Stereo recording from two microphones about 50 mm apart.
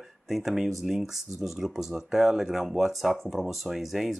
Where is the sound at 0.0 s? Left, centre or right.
Centre.